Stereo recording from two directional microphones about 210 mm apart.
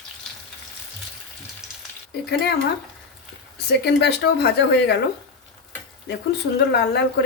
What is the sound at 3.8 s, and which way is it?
A woman's voice, 50° left (ahead or behind).